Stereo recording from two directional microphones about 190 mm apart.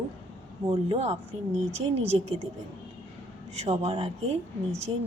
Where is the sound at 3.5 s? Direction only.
35° right (ahead or behind).